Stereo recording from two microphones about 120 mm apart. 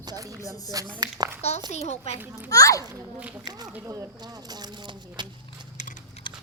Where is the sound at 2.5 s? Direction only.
30° left (ahead or behind).